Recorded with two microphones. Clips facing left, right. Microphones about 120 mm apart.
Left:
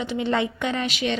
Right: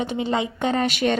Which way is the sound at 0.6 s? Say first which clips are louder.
Right 4 dB; 40° right (ahead or behind).